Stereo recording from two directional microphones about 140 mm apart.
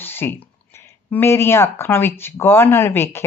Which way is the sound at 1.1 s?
15° left (ahead or behind).